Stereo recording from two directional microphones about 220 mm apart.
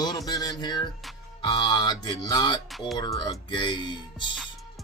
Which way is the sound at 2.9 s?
20° left (ahead or behind).